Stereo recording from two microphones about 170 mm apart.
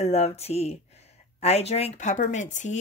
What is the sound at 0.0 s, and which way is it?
Speech, 40° left (ahead or behind).